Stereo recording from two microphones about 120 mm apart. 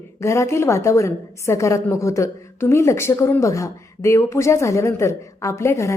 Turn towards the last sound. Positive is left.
turn(degrees=25)  # may be behind; listen again after turning